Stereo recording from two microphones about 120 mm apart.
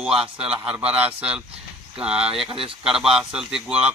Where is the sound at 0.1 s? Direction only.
55° right (ahead or behind).